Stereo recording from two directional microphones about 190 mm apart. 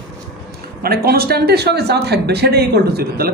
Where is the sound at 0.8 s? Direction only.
55° right (ahead or behind).